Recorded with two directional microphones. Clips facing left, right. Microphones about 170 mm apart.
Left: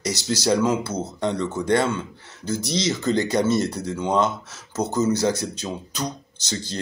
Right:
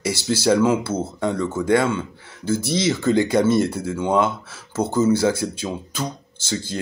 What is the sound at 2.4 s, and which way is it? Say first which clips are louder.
Speech: right 4 dB; 55° right (ahead or behind).